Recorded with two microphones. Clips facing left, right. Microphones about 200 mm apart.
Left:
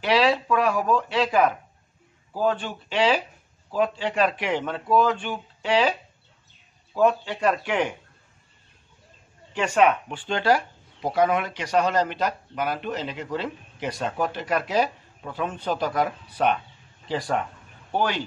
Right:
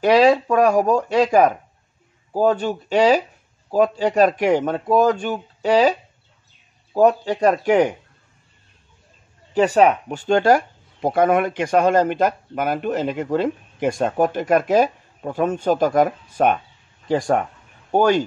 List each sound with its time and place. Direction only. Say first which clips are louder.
0.0 s speech: right 7 dB; 45° right (ahead or behind)
9.5 s speech: right 5 dB; 35° right (ahead or behind)